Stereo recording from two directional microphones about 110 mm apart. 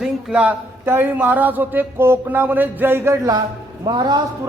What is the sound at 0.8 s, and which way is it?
Speech, 20° right (ahead or behind).